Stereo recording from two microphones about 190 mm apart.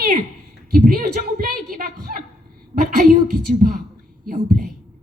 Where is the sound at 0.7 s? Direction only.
50° right (ahead or behind).